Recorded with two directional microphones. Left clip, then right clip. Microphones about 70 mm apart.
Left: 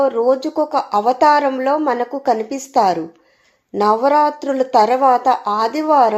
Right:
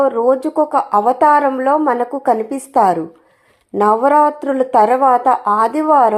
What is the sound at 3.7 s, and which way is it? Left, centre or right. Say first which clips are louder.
A woman's voice: right 2 dB; centre.